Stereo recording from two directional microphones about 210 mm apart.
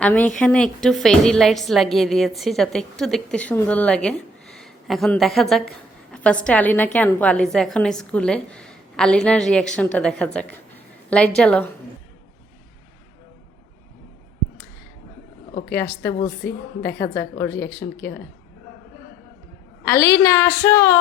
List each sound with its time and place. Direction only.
0.0 s a woman's voice: 5° left (ahead or behind)
15.7 s a woman's voice: 10° left (ahead or behind)
16.4 s a woman's voice: 50° left (ahead or behind)
17.3 s a woman's voice: 10° left (ahead or behind)
19.8 s a woman's voice: 15° left (ahead or behind)